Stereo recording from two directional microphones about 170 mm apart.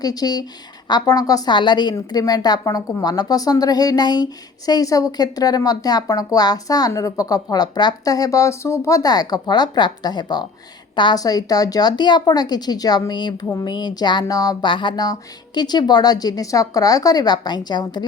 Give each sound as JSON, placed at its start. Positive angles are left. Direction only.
{"t": 0.0, "sound": "a woman's voice", "side_deg": 20}